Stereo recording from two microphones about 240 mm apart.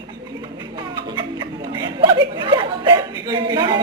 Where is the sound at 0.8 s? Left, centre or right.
Centre.